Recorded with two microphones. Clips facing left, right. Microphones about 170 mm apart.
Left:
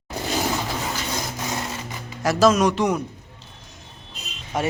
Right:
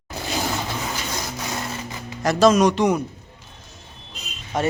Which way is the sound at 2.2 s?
5° left (ahead or behind).